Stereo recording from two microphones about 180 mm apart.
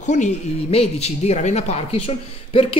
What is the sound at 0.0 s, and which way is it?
Speech, 40° left (ahead or behind).